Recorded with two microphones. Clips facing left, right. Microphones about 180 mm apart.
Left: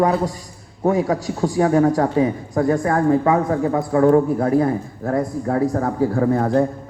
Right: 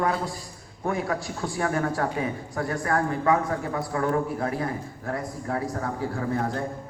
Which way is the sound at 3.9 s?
35° left (ahead or behind).